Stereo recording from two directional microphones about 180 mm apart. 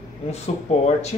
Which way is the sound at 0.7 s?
35° left (ahead or behind).